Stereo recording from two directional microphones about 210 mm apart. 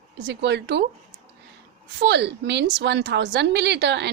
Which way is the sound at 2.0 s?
55° right (ahead or behind).